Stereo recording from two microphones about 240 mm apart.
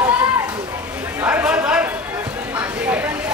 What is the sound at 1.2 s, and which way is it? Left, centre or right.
Chatter, centre.